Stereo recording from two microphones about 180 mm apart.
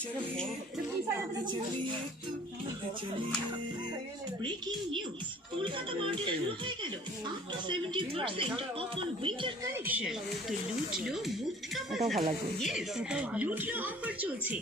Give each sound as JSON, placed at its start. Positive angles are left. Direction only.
{"t": 5.6, "sound": "speech", "side_deg": -30}
{"t": 9.7, "sound": "speech", "side_deg": -10}